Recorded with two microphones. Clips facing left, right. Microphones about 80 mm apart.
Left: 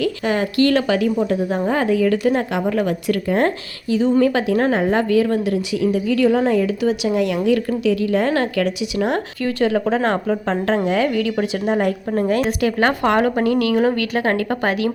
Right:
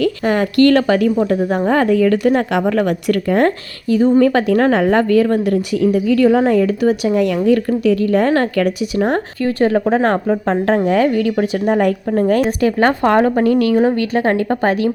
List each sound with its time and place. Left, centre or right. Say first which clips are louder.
0.0 s a woman's voice: right 4 dB; right
12.6 s a woman's voice: right 3 dB; right